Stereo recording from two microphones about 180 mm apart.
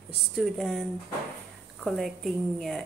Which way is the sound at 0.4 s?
Centre (ahead or behind).